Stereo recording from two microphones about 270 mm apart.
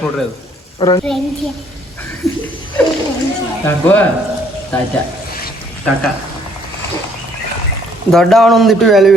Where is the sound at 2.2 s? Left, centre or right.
Centre.